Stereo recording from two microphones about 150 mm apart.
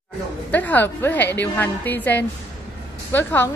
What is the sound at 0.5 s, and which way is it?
A woman's voice, 10° left (ahead or behind).